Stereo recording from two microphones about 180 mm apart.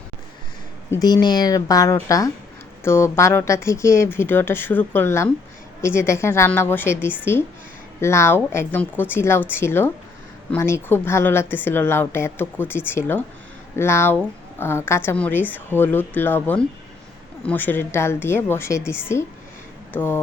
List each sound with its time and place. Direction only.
0.9 s a woman's voice: 20° left (ahead or behind)
19.9 s speech: 10° left (ahead or behind)